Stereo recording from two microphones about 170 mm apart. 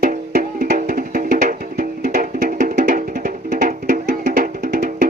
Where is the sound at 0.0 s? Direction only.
50° right (ahead or behind).